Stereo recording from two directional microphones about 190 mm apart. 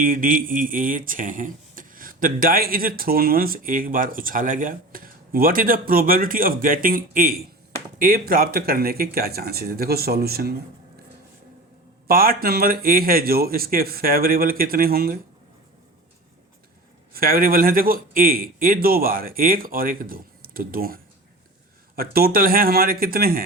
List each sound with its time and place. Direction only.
0.0 s speech: 45° right (ahead or behind)
12.0 s speech: 50° right (ahead or behind)
17.2 s speech: 50° right (ahead or behind)